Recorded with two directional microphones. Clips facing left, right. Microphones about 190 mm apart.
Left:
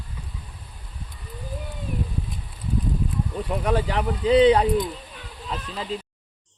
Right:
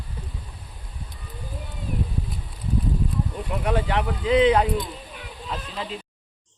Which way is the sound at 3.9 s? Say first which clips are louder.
Left 2 dB; 35° left (ahead or behind).